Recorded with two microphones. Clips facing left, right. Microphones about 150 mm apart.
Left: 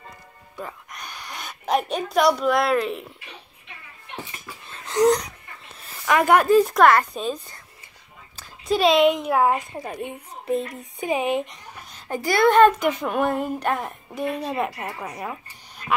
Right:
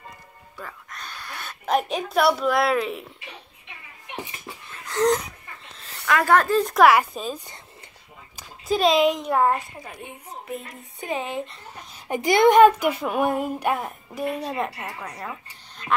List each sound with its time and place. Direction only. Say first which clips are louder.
0.6 s a sound: left 3 dB; 15° left (ahead or behind)
1.7 s a woman's voice: even; centre (ahead or behind)
5.0 s a woman's voice: left 3 dB; centre (ahead or behind)
6.0 s speech: left 2 dB; 15° left (ahead or behind)
6.7 s a woman's voice: even; 5° right (ahead or behind)
8.6 s a woman's voice: left 2 dB; centre (ahead or behind)
11.0 s speech: left 5 dB; 15° left (ahead or behind)
12.1 s speech: right 2 dB; 20° right (ahead or behind); by 14.7 s centre (ahead or behind)
15.0 s speech: left 3 dB; 15° left (ahead or behind)